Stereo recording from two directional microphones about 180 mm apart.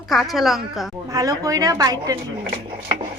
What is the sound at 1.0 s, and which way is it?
A woman's voice, 20° right (ahead or behind).